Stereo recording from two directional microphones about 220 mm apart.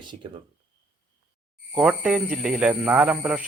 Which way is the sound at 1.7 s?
5° right (ahead or behind).